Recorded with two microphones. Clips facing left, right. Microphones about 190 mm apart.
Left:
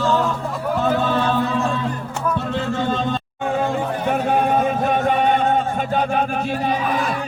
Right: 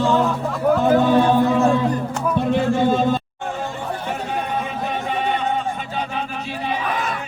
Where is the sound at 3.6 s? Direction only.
55° left (ahead or behind).